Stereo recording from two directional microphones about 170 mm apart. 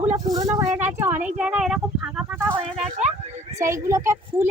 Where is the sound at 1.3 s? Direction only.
5° right (ahead or behind).